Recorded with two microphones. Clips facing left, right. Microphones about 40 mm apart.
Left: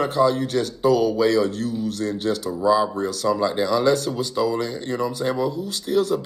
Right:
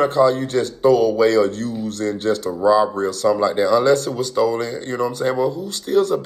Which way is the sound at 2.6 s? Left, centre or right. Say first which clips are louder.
Right 4 dB; centre.